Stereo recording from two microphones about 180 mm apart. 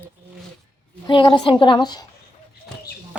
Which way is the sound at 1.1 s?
25° left (ahead or behind).